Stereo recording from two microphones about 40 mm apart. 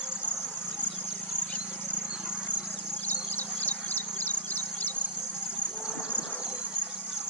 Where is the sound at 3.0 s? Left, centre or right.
Left.